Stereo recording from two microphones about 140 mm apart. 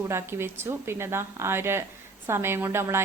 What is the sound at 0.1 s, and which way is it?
A woman's voice, 15° right (ahead or behind).